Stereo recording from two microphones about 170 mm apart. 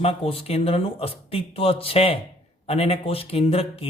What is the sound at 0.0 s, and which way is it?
A man's voice, 35° left (ahead or behind).